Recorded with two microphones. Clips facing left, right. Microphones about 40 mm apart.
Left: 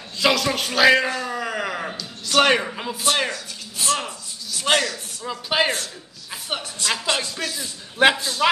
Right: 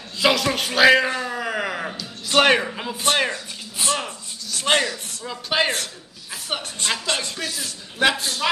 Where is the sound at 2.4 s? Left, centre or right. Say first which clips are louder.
Right 1 dB; centre.